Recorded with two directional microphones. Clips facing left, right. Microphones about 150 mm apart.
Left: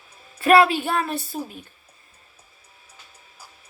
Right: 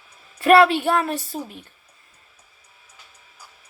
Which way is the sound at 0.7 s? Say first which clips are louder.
Right 3 dB; 65° right (ahead or behind).